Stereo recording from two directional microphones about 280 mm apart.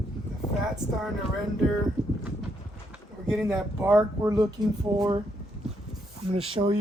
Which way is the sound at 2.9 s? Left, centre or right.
Centre.